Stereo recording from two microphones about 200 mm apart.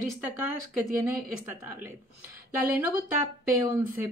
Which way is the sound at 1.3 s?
10° right (ahead or behind).